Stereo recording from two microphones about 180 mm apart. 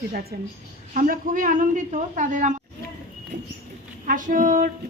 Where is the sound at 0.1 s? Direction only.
60° right (ahead or behind).